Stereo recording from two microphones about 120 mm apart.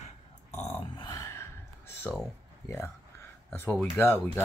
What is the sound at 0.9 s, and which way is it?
Grunt, 40° left (ahead or behind).